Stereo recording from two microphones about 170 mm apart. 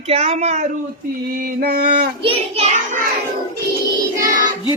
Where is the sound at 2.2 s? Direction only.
35° right (ahead or behind).